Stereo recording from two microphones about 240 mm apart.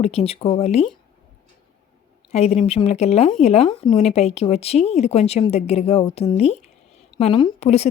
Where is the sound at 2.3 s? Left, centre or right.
Left.